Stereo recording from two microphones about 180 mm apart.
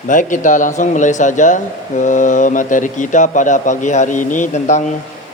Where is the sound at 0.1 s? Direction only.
45° left (ahead or behind).